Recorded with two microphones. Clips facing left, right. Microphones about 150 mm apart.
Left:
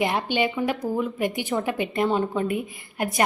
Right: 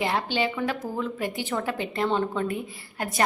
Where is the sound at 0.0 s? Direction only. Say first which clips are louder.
Left 2 dB; 15° left (ahead or behind).